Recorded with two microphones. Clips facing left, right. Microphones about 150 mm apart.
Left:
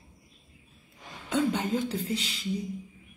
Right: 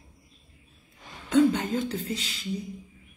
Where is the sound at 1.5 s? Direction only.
10° left (ahead or behind).